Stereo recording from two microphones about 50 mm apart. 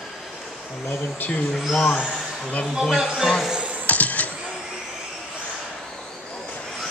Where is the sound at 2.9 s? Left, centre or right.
Centre.